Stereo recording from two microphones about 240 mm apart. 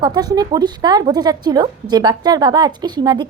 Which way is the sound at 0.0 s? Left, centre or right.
Centre.